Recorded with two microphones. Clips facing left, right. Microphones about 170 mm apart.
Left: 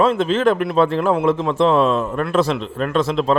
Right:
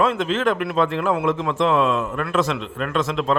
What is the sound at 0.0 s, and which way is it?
A man's voice, 35° left (ahead or behind).